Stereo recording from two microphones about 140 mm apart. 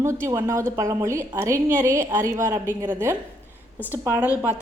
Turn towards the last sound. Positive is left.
turn(degrees=-15)  # may be behind; listen again after turning